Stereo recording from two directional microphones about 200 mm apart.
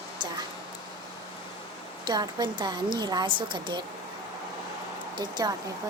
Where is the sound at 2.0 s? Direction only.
20° right (ahead or behind).